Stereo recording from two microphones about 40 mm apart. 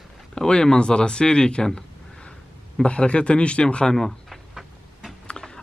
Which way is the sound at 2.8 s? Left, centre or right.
Left.